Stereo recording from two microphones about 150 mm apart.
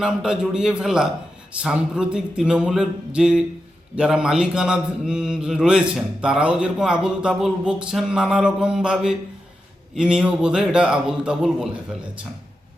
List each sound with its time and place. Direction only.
0.0 s mantra: 5° right (ahead or behind)